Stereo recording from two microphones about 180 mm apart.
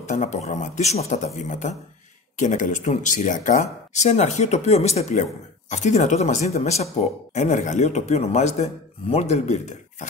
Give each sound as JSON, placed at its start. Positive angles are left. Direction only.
{"t": 0.1, "sound": "speech", "side_deg": 40}